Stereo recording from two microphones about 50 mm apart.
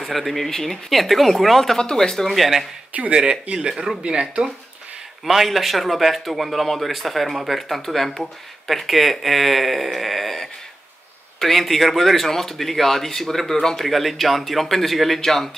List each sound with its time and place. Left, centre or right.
0.0 s speech: centre
3.2 s speech: centre
3.7 s speech: centre
4.0 s speech: centre
5.2 s speech: centre